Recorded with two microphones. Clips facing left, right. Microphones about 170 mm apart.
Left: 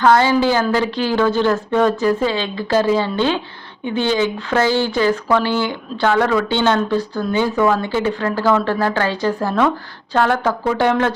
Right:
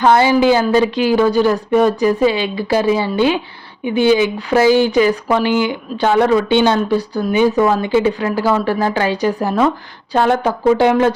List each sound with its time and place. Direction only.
0.0 s speech: 15° right (ahead or behind)